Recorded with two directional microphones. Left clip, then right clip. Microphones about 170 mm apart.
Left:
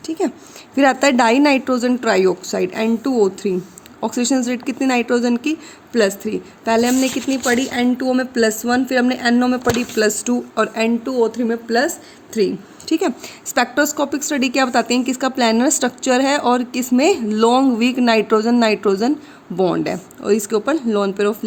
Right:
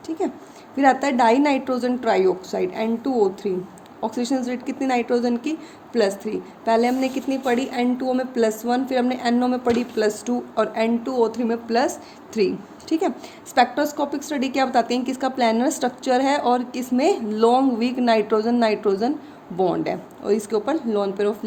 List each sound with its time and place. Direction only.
0.8 s speech: 50° left (ahead or behind); by 12.5 s 25° left (ahead or behind)
12.9 s speech: 45° left (ahead or behind)